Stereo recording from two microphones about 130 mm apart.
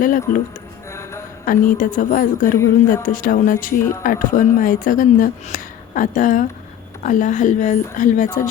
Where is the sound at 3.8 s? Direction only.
20° left (ahead or behind).